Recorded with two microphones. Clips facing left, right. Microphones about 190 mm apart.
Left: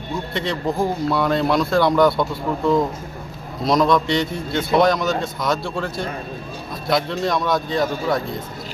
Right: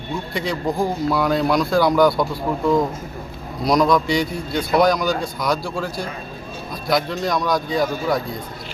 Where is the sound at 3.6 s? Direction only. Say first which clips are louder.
Even; centre (ahead or behind).